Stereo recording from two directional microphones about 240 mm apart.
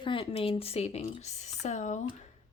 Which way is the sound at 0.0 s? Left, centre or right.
Left.